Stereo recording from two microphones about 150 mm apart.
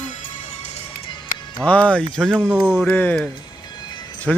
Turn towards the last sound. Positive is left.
turn(degrees=5)  # may be behind; listen again after turning